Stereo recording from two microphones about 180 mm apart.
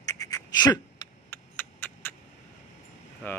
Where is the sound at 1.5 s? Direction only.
10° left (ahead or behind).